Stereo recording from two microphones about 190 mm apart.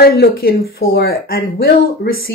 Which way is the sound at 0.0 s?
55° left (ahead or behind).